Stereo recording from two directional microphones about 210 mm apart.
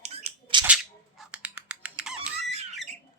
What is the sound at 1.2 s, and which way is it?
Computer keyboard, 5° right (ahead or behind).